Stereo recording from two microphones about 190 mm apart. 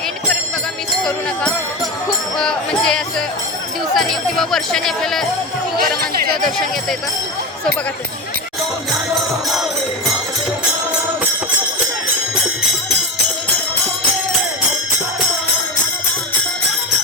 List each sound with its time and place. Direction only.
2.4 s speech: 5° left (ahead or behind)
5.8 s speech: 50° right (ahead or behind)